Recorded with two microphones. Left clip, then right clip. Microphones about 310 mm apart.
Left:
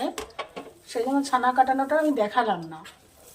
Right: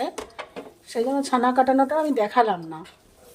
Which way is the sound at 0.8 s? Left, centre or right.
Right.